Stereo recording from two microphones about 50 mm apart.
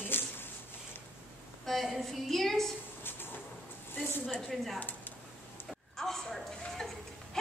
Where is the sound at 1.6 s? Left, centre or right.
Centre.